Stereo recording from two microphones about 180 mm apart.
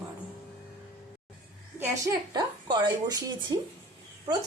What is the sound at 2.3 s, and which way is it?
Speech, 25° right (ahead or behind).